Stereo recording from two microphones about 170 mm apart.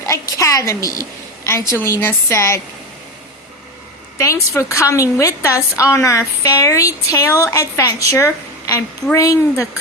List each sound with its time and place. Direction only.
0.0 s a woman's voice: 20° left (ahead or behind)
4.2 s a woman's voice: 15° left (ahead or behind)